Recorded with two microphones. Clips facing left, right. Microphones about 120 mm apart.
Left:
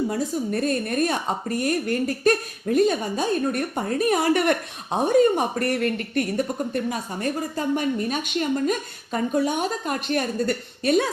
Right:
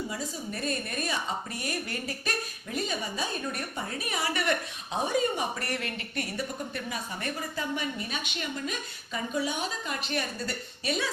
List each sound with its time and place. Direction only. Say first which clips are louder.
0.1 s speech: left 11 dB; 55° left (ahead or behind)